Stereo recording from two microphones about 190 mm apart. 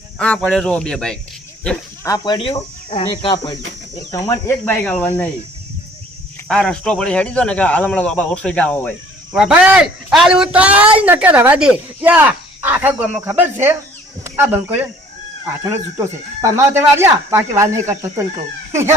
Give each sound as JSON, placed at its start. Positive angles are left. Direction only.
{"t": 0.2, "sound": "speech", "side_deg": 5}
{"t": 2.0, "sound": "speech", "side_deg": 20}
{"t": 6.5, "sound": "speech", "side_deg": 5}
{"t": 9.3, "sound": "speech", "side_deg": -5}
{"t": 16.4, "sound": "speech", "side_deg": -15}